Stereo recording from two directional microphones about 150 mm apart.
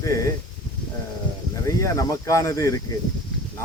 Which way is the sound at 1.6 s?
20° left (ahead or behind).